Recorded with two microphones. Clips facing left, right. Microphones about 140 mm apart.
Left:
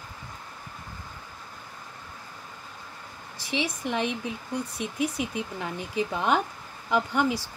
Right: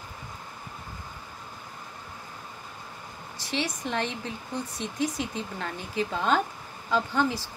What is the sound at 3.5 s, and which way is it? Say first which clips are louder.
A woman's voice: left 1 dB; 15° left (ahead or behind).